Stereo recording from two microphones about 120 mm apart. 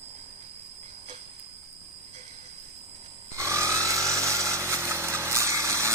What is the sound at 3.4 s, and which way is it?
Chainsaw, 25° right (ahead or behind).